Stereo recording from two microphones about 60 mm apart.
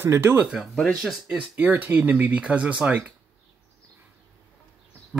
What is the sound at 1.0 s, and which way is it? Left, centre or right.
Speech, centre.